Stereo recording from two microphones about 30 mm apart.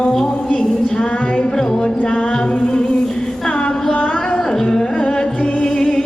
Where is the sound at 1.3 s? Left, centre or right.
Left.